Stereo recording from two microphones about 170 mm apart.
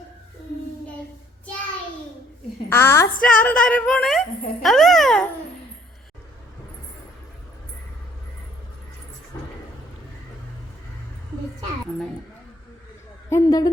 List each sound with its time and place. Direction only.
2.6 s a woman's voice: 15° left (ahead or behind)
13.3 s a woman's voice: 20° left (ahead or behind)